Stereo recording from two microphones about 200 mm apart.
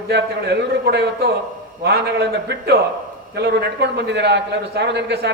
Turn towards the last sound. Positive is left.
turn(degrees=-60)  # may be behind; listen again after turning